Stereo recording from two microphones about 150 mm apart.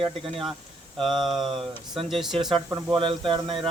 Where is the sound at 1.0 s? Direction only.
Centre (ahead or behind).